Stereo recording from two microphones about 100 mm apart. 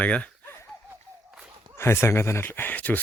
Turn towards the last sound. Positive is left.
turn(degrees=15)  # may be behind; listen again after turning